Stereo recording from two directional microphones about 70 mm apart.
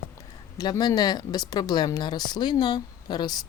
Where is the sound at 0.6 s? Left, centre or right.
Left.